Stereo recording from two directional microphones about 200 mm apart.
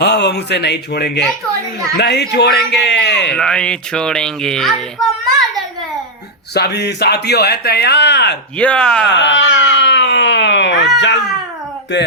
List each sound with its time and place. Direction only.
0.0 s a man's voice: 60° left (ahead or behind)
3.3 s speech: 5° left (ahead or behind)
5.0 s a sound: centre (ahead or behind)
6.5 s speech: 55° left (ahead or behind)
8.5 s speech: 5° left (ahead or behind)
9.1 s baby cry: 65° left (ahead or behind)